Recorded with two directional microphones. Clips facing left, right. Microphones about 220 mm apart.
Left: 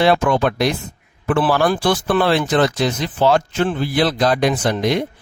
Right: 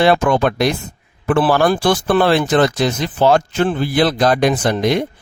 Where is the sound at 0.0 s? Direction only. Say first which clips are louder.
Right 2 dB; 50° right (ahead or behind).